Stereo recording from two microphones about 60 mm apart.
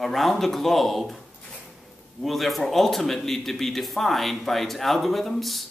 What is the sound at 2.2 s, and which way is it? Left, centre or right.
Speech, centre.